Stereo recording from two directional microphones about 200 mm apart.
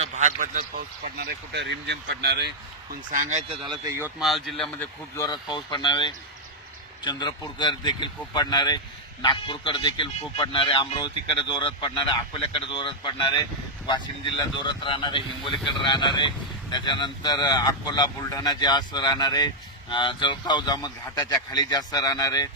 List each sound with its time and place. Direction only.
0.0 s speech: 35° right (ahead or behind)
1.0 s speech: 50° right (ahead or behind)
2.9 s speech: 40° right (ahead or behind); by 4.1 s 15° right (ahead or behind)
4.2 s speech: centre (ahead or behind)
5.1 s speech: 20° left (ahead or behind)
14.6 s speech: 25° left (ahead or behind)